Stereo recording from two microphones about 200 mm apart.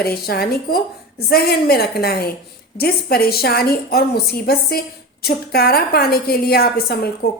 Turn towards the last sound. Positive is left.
turn(degrees=50)  # may be behind; listen again after turning